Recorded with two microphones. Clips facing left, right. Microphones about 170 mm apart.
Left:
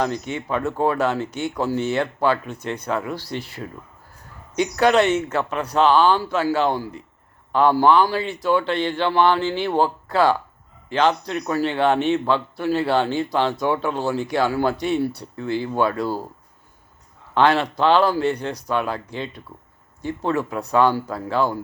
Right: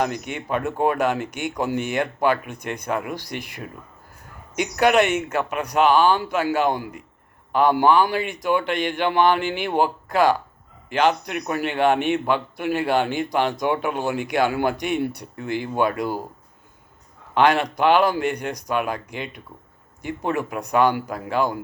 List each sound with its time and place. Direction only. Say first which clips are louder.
0.0 s speech: left 1 dB; 15° right (ahead or behind)
17.3 s speech: even; 15° right (ahead or behind)